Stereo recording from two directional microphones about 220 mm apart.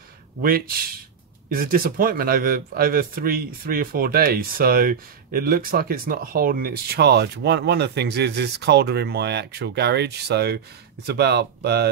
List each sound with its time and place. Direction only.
0.4 s speech: 40° right (ahead or behind)